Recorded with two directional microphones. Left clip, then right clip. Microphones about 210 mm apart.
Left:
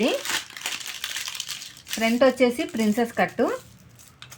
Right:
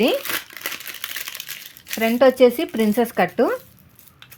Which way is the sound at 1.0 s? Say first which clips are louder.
Even; 10° right (ahead or behind).